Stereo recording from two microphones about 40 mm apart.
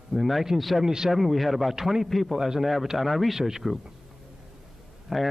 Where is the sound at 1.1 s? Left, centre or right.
Centre.